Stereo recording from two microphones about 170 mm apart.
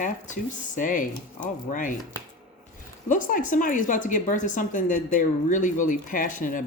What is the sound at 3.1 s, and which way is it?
Speech, 50° left (ahead or behind).